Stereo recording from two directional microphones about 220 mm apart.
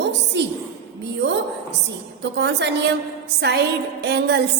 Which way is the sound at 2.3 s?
50° right (ahead or behind).